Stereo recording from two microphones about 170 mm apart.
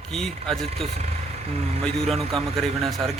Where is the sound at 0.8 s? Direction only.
40° right (ahead or behind).